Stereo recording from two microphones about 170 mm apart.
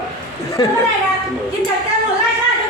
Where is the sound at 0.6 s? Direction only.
30° left (ahead or behind).